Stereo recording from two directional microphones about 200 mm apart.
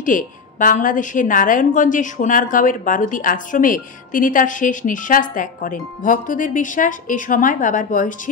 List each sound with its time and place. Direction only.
0.0 s a woman's voice: 40° left (ahead or behind)